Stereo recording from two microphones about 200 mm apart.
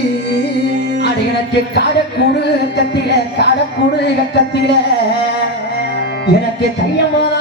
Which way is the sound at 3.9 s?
55° left (ahead or behind).